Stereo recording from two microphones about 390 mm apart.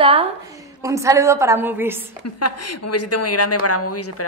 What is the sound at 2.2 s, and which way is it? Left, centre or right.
Speech, left.